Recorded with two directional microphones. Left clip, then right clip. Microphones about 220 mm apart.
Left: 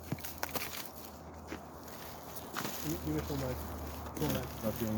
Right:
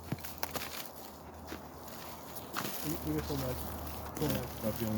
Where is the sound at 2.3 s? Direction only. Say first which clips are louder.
Right 1 dB; centre (ahead or behind).